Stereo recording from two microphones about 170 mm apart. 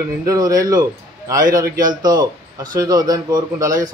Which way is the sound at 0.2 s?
20° right (ahead or behind).